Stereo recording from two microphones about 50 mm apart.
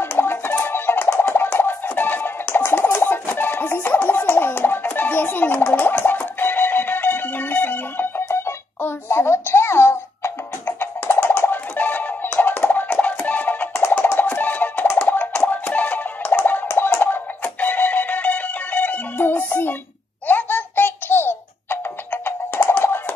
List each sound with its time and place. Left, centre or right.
0.2 s music: left
8.3 s a sound: left
11.1 s music: left
16.3 s a sound: left
16.6 s music: left
20.2 s baby laughter: left
22.1 s music: left